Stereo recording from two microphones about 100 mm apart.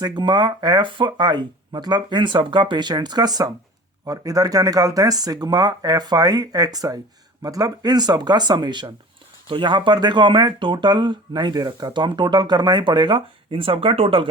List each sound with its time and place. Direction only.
0.0 s speech: 50° right (ahead or behind); by 14.3 s 65° right (ahead or behind)